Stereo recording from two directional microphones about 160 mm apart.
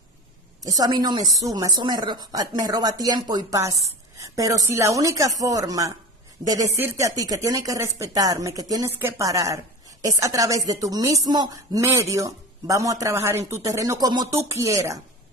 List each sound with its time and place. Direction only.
0.7 s speech: 25° right (ahead or behind)